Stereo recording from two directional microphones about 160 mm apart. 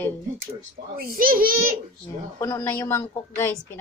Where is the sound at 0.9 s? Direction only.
65° right (ahead or behind).